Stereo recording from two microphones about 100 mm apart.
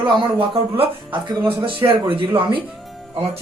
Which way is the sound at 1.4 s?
60° right (ahead or behind).